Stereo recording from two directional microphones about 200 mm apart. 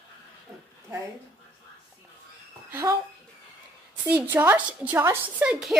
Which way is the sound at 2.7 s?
15° right (ahead or behind).